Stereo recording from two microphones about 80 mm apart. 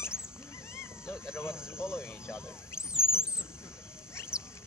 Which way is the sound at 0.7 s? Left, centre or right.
Left.